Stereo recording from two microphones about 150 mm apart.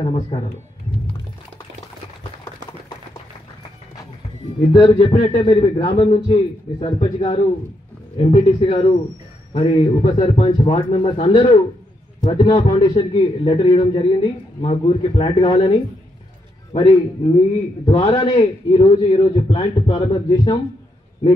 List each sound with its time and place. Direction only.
0.0 s a man's voice: 40° left (ahead or behind)
4.7 s a man's voice: 40° left (ahead or behind)